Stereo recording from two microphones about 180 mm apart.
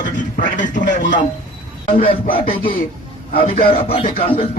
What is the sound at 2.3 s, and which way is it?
Speech, 30° left (ahead or behind).